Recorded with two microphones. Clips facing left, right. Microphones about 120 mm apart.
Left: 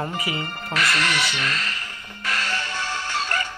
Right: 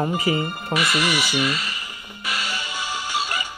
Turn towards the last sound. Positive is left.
turn(degrees=-10)  # may be behind; listen again after turning